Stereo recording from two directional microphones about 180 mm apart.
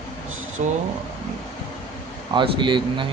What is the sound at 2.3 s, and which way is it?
Speech, 25° right (ahead or behind).